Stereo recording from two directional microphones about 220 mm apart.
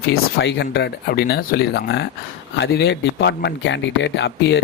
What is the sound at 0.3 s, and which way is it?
Speech, 50° left (ahead or behind).